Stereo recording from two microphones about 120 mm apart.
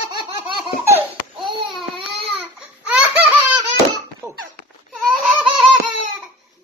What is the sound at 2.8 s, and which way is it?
Laughter, 10° right (ahead or behind).